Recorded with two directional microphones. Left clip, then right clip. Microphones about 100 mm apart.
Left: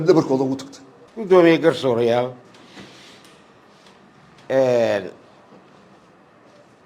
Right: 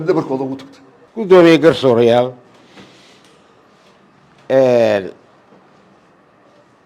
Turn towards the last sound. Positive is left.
turn(degrees=-70)  # may be behind; listen again after turning